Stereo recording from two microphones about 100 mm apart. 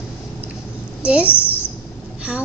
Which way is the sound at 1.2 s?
20° left (ahead or behind).